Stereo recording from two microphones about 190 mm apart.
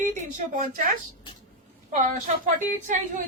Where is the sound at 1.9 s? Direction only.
40° right (ahead or behind).